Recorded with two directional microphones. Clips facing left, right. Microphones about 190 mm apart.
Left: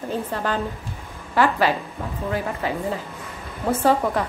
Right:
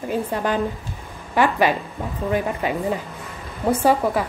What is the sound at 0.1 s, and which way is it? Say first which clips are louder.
A woman's voice: right 3 dB; 15° right (ahead or behind).